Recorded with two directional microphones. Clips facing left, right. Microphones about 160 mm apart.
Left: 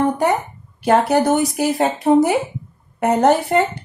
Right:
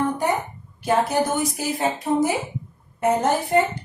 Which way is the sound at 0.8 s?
70° left (ahead or behind).